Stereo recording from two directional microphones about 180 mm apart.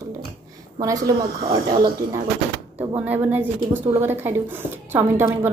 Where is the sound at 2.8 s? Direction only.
10° right (ahead or behind).